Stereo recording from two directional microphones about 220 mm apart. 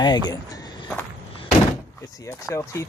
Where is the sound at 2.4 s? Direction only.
15° left (ahead or behind).